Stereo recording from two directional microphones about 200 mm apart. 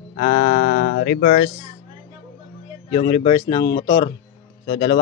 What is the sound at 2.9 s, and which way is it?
Speech, 30° left (ahead or behind).